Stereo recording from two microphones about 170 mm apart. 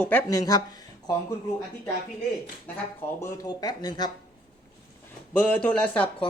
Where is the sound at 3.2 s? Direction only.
20° left (ahead or behind).